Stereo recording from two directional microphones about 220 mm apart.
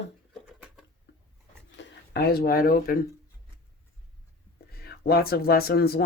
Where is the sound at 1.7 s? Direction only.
50° left (ahead or behind).